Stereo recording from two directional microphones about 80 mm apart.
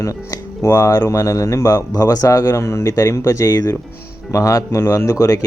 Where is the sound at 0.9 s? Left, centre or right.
Left.